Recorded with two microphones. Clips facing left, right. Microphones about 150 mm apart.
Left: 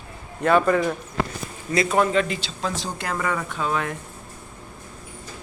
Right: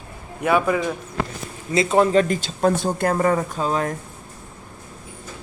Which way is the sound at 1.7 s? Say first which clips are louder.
Right 3 dB; 25° right (ahead or behind).